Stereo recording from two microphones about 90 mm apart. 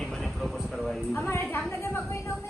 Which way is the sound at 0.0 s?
5° left (ahead or behind).